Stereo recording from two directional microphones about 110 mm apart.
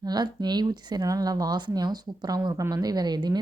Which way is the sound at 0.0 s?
40° right (ahead or behind).